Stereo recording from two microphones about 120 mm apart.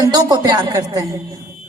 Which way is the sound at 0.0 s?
35° right (ahead or behind).